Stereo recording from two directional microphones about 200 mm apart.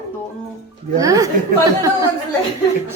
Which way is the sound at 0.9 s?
15° right (ahead or behind).